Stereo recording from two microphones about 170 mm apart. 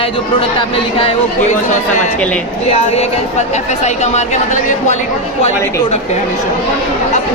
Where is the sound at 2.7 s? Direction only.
35° left (ahead or behind).